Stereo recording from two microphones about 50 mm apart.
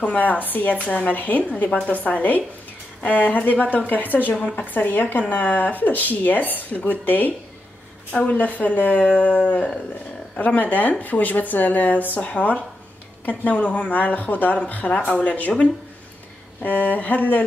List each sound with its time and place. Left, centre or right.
0.0 s speech: left
9.0 s dog: left
10.3 s speech: left
12.2 s dog: left
13.2 s speech: left
14.7 s dog: left
16.6 s speech: left